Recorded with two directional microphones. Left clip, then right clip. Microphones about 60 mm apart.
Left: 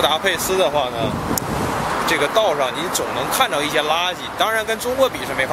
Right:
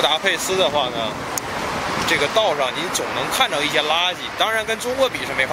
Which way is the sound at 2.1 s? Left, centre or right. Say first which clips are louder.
Left 1 dB; centre.